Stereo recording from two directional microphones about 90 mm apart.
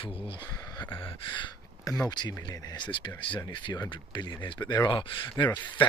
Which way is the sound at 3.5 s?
55° left (ahead or behind).